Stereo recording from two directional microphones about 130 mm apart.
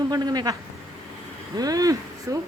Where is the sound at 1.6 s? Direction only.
30° right (ahead or behind).